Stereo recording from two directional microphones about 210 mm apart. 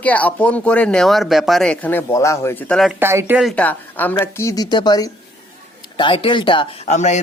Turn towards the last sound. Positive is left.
turn(degrees=35)  # may be behind; listen again after turning